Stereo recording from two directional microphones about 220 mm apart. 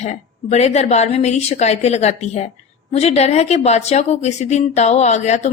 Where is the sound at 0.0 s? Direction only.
30° left (ahead or behind).